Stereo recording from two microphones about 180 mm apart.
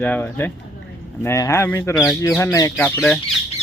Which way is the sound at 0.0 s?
10° left (ahead or behind).